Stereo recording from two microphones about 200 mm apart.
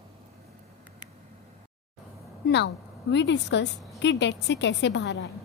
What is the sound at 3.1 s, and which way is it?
A woman's voice, 60° left (ahead or behind).